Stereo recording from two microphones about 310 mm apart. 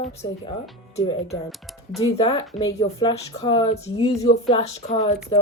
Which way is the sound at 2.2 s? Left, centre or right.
Centre.